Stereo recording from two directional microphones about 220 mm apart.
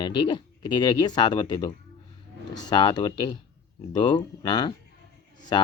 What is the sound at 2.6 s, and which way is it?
Speech, 20° left (ahead or behind).